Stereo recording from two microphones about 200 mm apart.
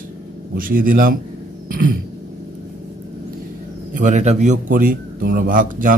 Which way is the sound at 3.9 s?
40° right (ahead or behind).